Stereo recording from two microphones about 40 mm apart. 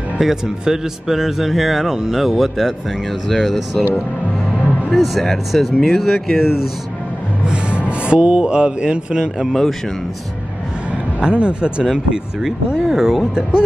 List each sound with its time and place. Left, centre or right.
0.2 s speech: centre
4.9 s speech: centre
7.4 s speech: right
11.1 s speech: right
11.8 s speech: centre